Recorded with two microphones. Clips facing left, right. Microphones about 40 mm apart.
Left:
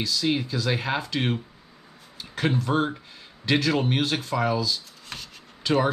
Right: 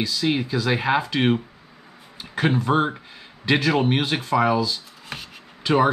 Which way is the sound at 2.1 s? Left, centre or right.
Centre.